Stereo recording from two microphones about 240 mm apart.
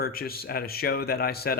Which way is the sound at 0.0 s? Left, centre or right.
Left.